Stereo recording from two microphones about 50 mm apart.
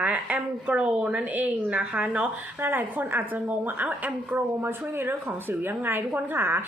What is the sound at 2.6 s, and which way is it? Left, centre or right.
A woman's voice, right.